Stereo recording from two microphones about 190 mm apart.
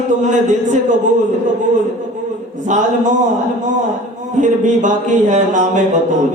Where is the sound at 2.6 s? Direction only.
40° right (ahead or behind).